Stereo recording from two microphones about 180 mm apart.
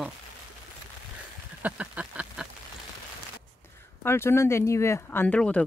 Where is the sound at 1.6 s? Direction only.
10° right (ahead or behind).